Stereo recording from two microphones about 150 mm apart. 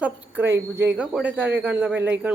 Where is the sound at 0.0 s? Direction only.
15° right (ahead or behind).